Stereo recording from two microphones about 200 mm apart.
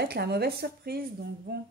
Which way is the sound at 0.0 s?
55° right (ahead or behind).